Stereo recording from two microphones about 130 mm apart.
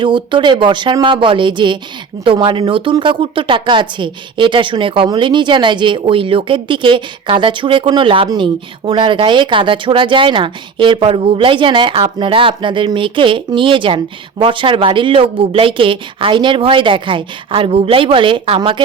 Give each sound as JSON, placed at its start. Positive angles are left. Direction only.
{"t": 0.0, "sound": "speech", "side_deg": -40}